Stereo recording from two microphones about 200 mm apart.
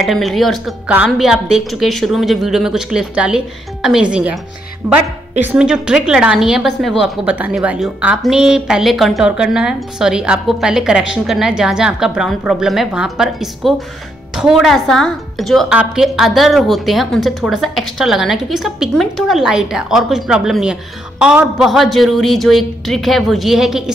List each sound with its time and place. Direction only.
0.0 s a woman's voice: centre (ahead or behind)